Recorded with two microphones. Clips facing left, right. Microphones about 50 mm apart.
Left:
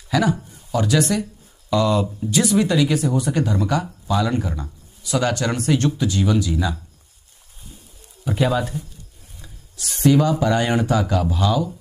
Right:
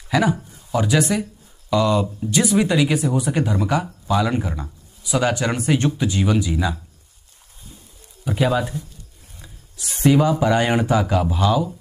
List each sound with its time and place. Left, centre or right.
0.1 s speech: centre
1.7 s speech: centre
2.5 s speech: centre
8.3 s speech: centre
9.4 s a sound: centre
10.4 s speech: centre